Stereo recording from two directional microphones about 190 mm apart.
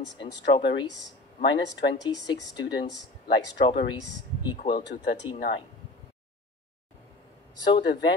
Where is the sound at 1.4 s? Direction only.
65° left (ahead or behind).